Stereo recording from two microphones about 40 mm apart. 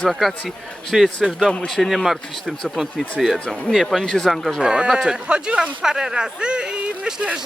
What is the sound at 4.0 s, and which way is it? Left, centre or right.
Speech, centre.